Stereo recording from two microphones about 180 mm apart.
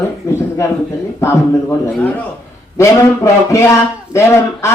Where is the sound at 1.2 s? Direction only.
15° left (ahead or behind).